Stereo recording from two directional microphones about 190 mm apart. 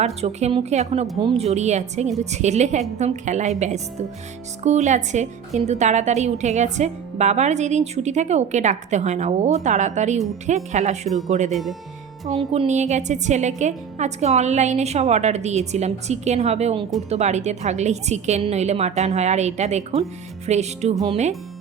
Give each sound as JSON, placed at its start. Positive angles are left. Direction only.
{"t": 0.0, "sound": "a woman's voice", "side_deg": -35}
{"t": 4.6, "sound": "a woman's voice", "side_deg": -40}